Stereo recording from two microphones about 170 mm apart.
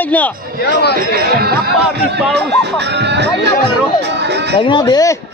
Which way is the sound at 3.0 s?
90° right.